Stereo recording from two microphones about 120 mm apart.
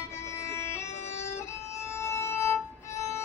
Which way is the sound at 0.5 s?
25° left (ahead or behind).